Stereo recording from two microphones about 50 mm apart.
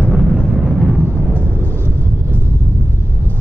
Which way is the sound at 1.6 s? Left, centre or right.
Left.